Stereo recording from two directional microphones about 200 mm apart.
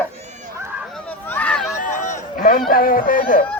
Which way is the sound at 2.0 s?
40° left (ahead or behind).